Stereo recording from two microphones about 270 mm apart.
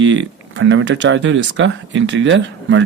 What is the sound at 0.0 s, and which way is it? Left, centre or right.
Speech, right.